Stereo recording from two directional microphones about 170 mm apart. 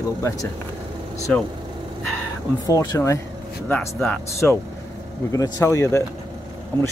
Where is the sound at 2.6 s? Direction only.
20° left (ahead or behind).